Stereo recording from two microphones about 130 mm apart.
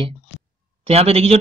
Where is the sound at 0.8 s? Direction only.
50° right (ahead or behind).